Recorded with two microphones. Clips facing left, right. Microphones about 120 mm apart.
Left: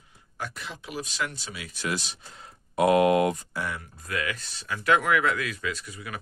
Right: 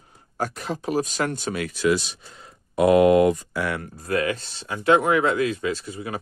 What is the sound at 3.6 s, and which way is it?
Speech, 70° right (ahead or behind).